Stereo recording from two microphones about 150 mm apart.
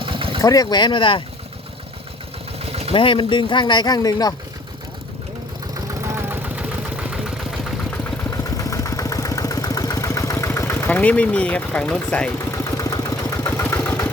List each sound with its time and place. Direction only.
0.0 s vehicle: 35° right (ahead or behind)
0.4 s speech: 25° left (ahead or behind)
2.9 s speech: 35° left (ahead or behind)
5.9 s vehicle: 15° right (ahead or behind)
8.5 s vehicle: 20° left (ahead or behind)
12.7 s engine: 25° left (ahead or behind)
13.6 s vehicle: 10° left (ahead or behind)